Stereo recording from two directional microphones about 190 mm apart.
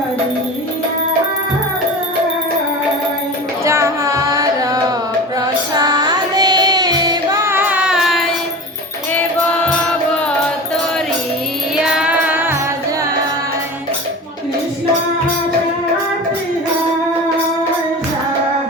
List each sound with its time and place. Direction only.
3.6 s music: 15° right (ahead or behind)
11.8 s music: 5° right (ahead or behind)